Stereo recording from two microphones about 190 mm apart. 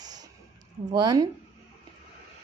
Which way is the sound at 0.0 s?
20° right (ahead or behind).